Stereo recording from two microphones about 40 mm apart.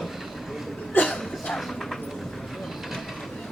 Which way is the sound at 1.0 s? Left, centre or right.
Left.